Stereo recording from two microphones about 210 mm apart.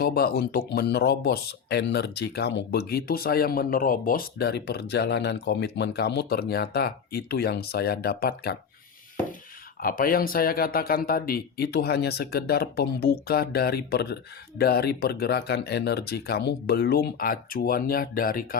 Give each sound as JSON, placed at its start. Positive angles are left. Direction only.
{"t": 0.0, "sound": "speech", "side_deg": 45}
{"t": 9.8, "sound": "speech", "side_deg": 45}